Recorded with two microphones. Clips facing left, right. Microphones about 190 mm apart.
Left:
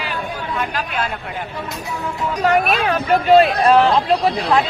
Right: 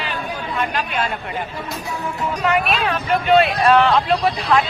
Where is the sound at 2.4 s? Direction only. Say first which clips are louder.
Left 3 dB; 45° left (ahead or behind).